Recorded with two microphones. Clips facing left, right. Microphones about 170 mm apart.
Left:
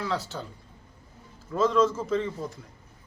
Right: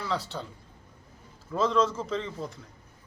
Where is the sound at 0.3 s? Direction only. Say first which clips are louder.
Even; centre (ahead or behind).